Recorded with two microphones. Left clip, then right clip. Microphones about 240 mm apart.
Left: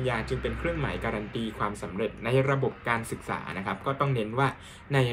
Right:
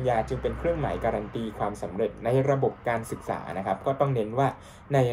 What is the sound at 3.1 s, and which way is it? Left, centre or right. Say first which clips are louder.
Speech: right 2 dB; left.